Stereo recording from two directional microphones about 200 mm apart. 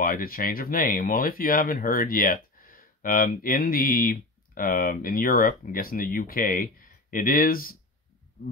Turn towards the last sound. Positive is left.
turn(degrees=45)  # may be behind; listen again after turning